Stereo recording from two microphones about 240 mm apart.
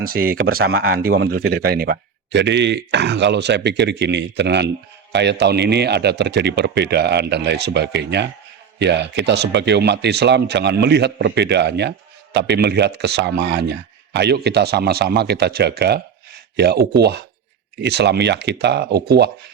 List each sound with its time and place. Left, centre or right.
0.0 s speech: right
17.7 s speech: right